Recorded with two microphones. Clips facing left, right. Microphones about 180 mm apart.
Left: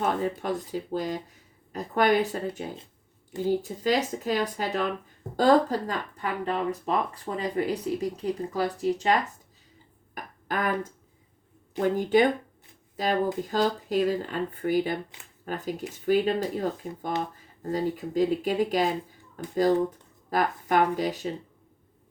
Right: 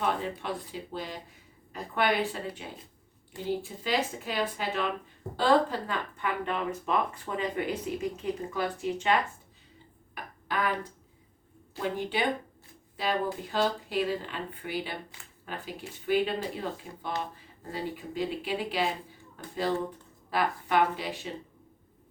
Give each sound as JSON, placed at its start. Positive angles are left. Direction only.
{"t": 0.0, "sound": "speech", "side_deg": 45}
{"t": 10.2, "sound": "a sound", "side_deg": 45}
{"t": 11.8, "sound": "speech", "side_deg": 45}
{"t": 20.3, "sound": "speech", "side_deg": 45}